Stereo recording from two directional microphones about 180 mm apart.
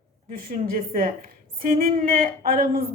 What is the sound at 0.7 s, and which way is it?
A woman's voice, 50° right (ahead or behind).